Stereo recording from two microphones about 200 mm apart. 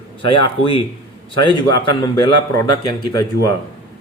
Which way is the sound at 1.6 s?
20° left (ahead or behind).